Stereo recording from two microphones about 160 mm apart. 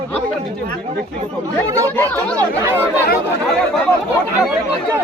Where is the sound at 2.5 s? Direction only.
15° right (ahead or behind).